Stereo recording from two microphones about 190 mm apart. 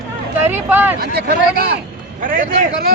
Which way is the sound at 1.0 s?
55° right (ahead or behind).